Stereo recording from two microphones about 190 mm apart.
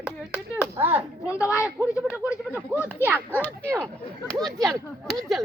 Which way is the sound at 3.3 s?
10° left (ahead or behind).